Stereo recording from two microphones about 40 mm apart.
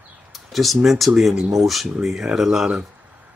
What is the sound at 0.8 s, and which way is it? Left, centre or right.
Speech, centre.